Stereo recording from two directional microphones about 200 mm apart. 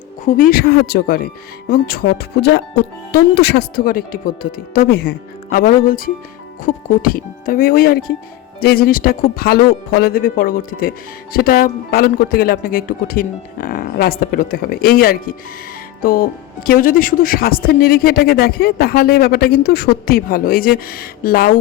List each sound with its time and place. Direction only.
0.3 s speech: 45° left (ahead or behind)